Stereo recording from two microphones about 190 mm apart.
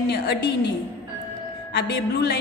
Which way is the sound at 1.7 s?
60° left (ahead or behind).